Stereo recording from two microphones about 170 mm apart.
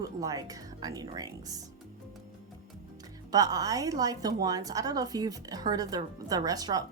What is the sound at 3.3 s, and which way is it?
Speech, 20° right (ahead or behind).